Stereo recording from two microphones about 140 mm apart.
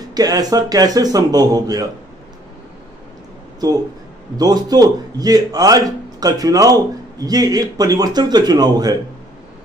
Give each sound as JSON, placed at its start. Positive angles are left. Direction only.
{"t": 0.1, "sound": "a man's voice", "side_deg": -25}
{"t": 4.4, "sound": "a man's voice", "side_deg": -30}